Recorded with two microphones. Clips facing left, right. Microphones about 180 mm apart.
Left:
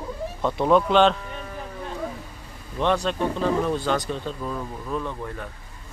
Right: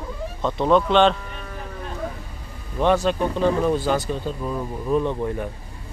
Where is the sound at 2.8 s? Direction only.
5° right (ahead or behind); by 5.4 s 20° right (ahead or behind).